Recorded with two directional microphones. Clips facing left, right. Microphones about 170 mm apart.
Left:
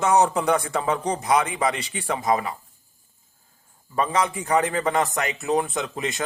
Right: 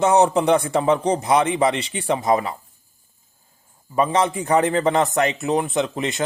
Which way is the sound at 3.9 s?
25° right (ahead or behind).